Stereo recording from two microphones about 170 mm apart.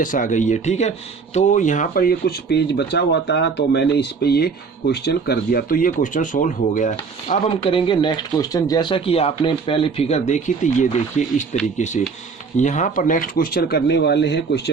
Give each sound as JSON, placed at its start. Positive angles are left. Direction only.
{"t": 0.0, "sound": "speech", "side_deg": 50}
{"t": 7.6, "sound": "speech", "side_deg": 30}